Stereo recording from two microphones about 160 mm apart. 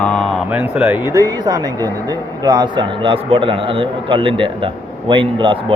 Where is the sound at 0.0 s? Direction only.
5° left (ahead or behind).